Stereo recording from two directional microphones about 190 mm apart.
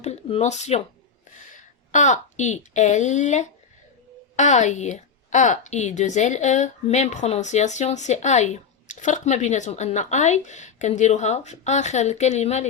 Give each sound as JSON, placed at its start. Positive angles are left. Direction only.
{"t": 0.0, "sound": "a woman's voice", "side_deg": 35}